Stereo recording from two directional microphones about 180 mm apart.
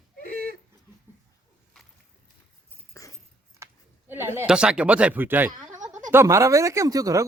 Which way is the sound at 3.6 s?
15° right (ahead or behind).